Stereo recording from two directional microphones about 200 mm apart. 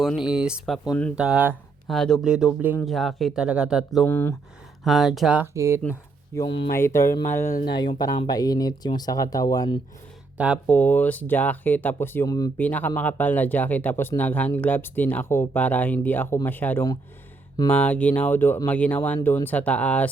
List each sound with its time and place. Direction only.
0.0 s speech: 5° right (ahead or behind)
4.0 s speech: 10° left (ahead or behind)
4.8 s speech: centre (ahead or behind)
5.8 s speech: 15° left (ahead or behind)
10.3 s speech: 5° right (ahead or behind)
10.7 s speech: 10° left (ahead or behind)